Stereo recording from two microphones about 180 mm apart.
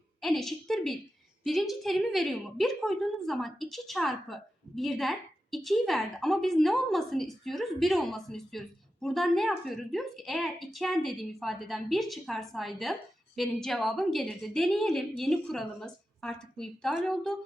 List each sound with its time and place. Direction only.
0.2 s a woman's voice: centre (ahead or behind)